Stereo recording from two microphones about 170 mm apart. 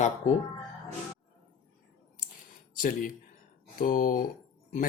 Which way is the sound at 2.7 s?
55° left (ahead or behind).